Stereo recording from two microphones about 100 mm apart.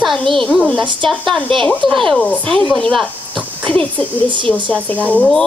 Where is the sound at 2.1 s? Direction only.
15° left (ahead or behind).